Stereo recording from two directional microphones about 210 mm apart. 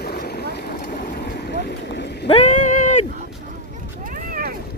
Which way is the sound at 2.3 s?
35° left (ahead or behind).